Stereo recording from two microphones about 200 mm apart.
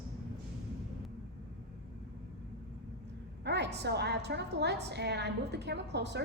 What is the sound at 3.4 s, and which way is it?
A woman's voice, 60° right (ahead or behind).